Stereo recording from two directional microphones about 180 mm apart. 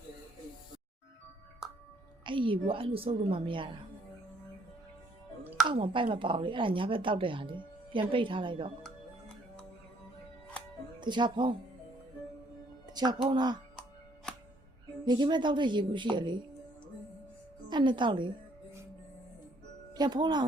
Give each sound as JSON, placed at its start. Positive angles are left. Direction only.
{"t": 2.2, "sound": "speech", "side_deg": -30}
{"t": 5.6, "sound": "speech", "side_deg": -30}
{"t": 11.0, "sound": "speech", "side_deg": -25}
{"t": 12.9, "sound": "speech", "side_deg": -20}
{"t": 15.0, "sound": "speech", "side_deg": -25}
{"t": 17.7, "sound": "speech", "side_deg": -25}
{"t": 19.9, "sound": "speech", "side_deg": -25}